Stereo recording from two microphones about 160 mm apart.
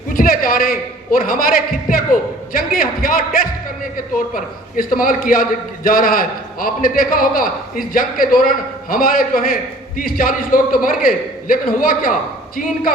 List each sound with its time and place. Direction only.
0.1 s a man's voice: 65° left (ahead or behind)